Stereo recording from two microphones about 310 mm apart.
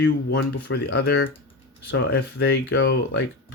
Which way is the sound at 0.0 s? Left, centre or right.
Left.